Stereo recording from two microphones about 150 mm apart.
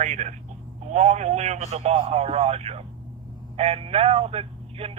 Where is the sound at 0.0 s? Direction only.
50° right (ahead or behind).